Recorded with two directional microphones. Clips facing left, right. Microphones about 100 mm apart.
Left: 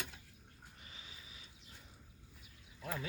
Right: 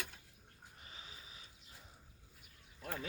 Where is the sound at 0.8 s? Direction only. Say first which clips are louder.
Right 3 dB; 35° right (ahead or behind).